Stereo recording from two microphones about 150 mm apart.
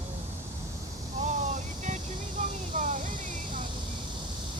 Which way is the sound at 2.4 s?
55° right (ahead or behind).